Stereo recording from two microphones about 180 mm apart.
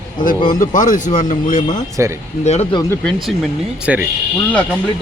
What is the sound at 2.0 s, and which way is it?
Speech, 15° right (ahead or behind).